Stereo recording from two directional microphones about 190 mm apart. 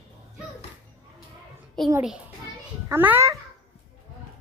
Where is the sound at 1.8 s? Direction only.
5° left (ahead or behind).